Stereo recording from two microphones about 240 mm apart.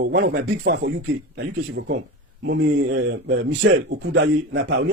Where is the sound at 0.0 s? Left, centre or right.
Right.